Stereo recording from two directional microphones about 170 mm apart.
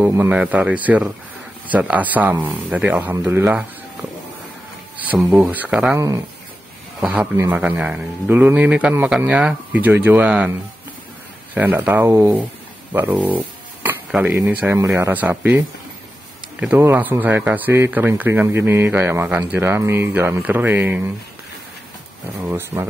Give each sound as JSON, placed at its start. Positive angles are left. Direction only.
{"t": 0.0, "sound": "speech", "side_deg": -10}
{"t": 4.9, "sound": "speech", "side_deg": -10}
{"t": 5.9, "sound": "speech", "side_deg": -20}
{"t": 7.0, "sound": "speech", "side_deg": -10}
{"t": 11.5, "sound": "speech", "side_deg": -10}
{"t": 22.5, "sound": "speech", "side_deg": -15}